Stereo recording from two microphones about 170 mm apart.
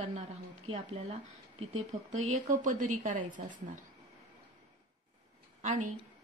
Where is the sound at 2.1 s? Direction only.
45° right (ahead or behind).